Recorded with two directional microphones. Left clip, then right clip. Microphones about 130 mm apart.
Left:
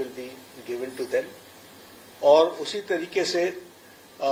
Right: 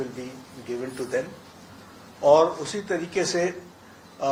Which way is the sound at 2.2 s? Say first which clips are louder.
Even; 40° left (ahead or behind).